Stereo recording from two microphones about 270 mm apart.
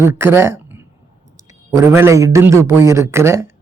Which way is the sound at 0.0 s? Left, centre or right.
Centre.